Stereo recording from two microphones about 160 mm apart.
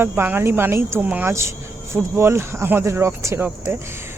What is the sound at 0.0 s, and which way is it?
Speech, 15° right (ahead or behind).